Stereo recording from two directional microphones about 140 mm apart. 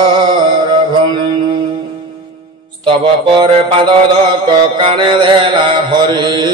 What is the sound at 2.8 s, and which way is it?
Mantra, 35° right (ahead or behind).